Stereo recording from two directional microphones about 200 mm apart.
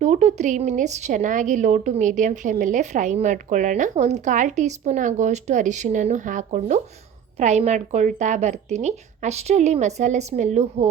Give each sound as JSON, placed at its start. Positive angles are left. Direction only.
{"t": 0.0, "sound": "a woman's voice", "side_deg": -35}